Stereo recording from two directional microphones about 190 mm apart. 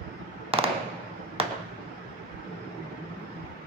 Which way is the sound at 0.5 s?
30° right (ahead or behind).